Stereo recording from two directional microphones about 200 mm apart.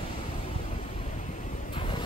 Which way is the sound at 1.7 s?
25° left (ahead or behind).